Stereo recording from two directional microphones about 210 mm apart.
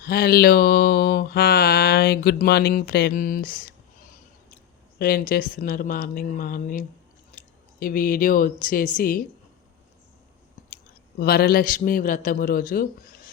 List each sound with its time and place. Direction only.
0.0 s mantra: 45° left (ahead or behind)
4.9 s a woman's voice: 45° left (ahead or behind)
11.2 s a man's voice: 45° left (ahead or behind)